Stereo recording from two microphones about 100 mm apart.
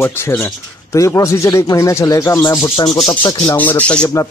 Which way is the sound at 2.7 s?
60° left (ahead or behind).